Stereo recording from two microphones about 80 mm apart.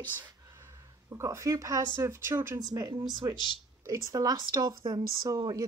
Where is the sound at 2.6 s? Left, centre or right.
Right.